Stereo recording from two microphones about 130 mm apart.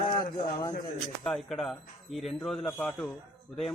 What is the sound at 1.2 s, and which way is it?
A man's voice, centre (ahead or behind).